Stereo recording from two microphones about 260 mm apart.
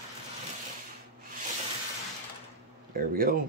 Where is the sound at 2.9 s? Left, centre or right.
Right.